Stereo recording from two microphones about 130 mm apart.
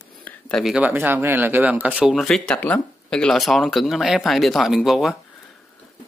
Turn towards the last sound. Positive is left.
turn(degrees=0)  # may be behind; listen again after turning